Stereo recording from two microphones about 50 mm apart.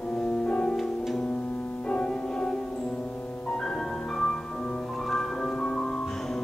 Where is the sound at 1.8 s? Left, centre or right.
Left.